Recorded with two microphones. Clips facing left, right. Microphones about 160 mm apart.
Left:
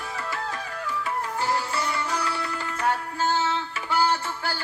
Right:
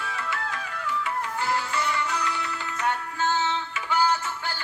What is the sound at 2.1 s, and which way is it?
Music, 35° left (ahead or behind).